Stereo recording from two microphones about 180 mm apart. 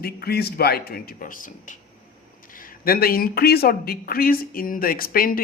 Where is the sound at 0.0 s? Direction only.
60° left (ahead or behind).